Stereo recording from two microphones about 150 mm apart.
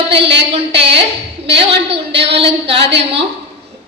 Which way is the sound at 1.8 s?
40° right (ahead or behind).